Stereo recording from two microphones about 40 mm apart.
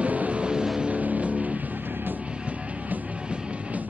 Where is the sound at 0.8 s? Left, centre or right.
Right.